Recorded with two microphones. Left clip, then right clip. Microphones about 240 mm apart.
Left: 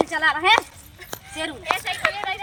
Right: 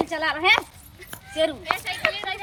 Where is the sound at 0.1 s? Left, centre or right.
Centre.